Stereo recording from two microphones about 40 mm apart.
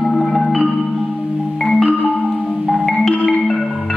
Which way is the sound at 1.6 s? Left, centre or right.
Centre.